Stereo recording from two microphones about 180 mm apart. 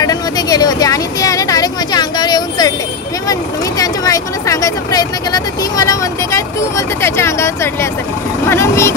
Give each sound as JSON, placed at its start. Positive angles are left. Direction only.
{"t": 0.0, "sound": "vehicle", "side_deg": 20}
{"t": 7.0, "sound": "speech", "side_deg": 15}
{"t": 8.5, "sound": "vehicle", "side_deg": 15}